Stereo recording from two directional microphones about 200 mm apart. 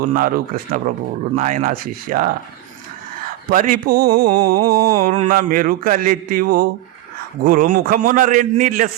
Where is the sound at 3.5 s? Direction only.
45° right (ahead or behind).